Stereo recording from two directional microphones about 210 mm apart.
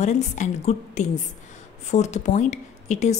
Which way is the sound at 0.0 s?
35° left (ahead or behind).